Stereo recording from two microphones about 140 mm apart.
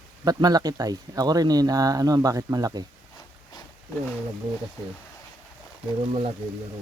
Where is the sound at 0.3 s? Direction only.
30° right (ahead or behind).